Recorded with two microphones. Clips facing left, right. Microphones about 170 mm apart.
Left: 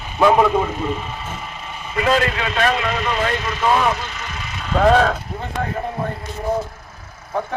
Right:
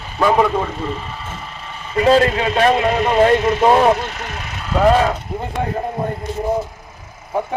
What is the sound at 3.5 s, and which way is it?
Speech, 30° right (ahead or behind).